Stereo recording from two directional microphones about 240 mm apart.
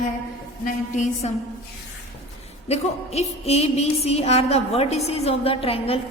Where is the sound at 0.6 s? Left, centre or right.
Left.